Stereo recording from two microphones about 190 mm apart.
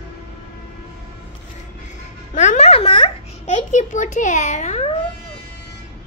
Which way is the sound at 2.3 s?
40° left (ahead or behind).